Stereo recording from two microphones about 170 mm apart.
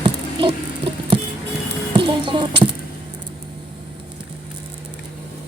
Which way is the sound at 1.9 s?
30° right (ahead or behind).